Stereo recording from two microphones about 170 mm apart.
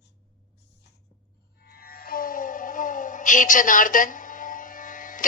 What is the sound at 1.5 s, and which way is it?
Music, 65° left (ahead or behind).